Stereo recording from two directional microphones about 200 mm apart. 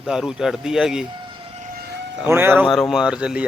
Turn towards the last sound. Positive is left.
turn(degrees=-5)  # may be behind; listen again after turning